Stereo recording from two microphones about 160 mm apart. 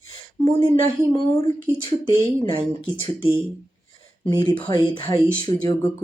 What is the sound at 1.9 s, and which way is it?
Speech, 30° left (ahead or behind).